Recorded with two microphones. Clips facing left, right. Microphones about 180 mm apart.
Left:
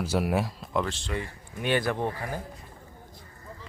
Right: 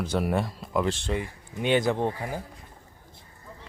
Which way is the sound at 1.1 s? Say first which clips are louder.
Right 3 dB; 20° right (ahead or behind).